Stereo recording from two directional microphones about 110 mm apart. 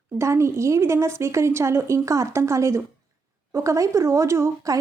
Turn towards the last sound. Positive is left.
turn(degrees=-30)  # may be behind; listen again after turning